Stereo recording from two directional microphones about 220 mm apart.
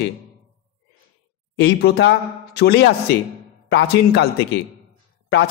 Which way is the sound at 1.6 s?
50° left (ahead or behind).